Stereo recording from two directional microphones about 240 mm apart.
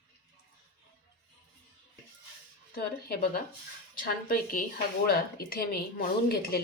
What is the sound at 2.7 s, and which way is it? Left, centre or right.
Speech, left.